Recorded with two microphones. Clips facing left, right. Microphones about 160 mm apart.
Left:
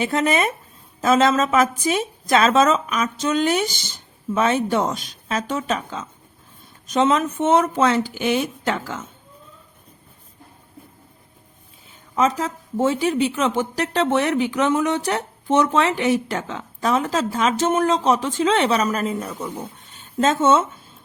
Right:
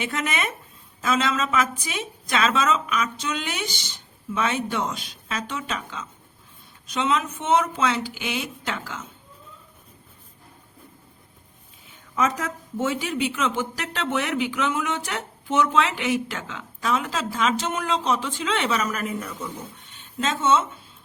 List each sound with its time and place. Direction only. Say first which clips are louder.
0.0 s speech: left 8 dB; 35° left (ahead or behind)
12.1 s speech: left 4 dB; 30° left (ahead or behind); by 20.7 s 50° left (ahead or behind)